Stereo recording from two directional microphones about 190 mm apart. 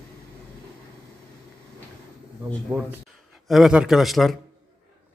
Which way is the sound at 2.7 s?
10° right (ahead or behind).